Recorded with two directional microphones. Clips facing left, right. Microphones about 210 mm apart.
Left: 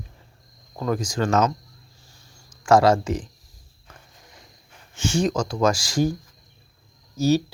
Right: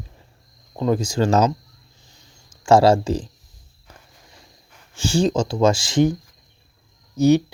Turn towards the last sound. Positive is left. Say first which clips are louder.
# right 5 dB
turn(degrees=-15)  # may be behind; listen again after turning